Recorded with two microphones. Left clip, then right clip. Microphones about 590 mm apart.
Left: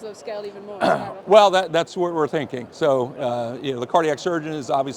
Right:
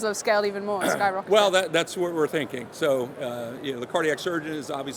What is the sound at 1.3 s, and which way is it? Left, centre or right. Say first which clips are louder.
A man's voice: left 8 dB; left.